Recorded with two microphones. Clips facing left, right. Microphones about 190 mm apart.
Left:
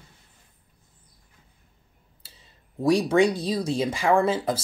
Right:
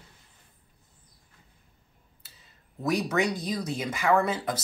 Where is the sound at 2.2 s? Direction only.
30° left (ahead or behind).